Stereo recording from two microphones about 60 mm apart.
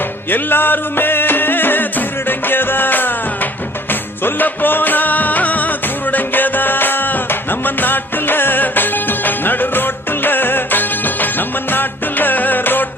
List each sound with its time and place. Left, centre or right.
0.3 s music: left
4.2 s music: left